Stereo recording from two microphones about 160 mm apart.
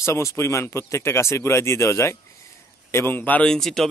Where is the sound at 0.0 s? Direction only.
15° left (ahead or behind).